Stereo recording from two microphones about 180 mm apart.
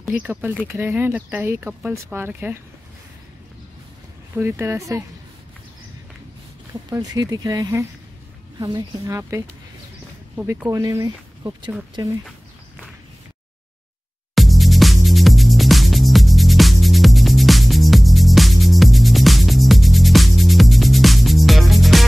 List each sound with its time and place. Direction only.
0.0 s speech: 10° right (ahead or behind)
4.4 s speech: 15° right (ahead or behind)
6.9 s speech: 20° right (ahead or behind)
14.3 s music: centre (ahead or behind)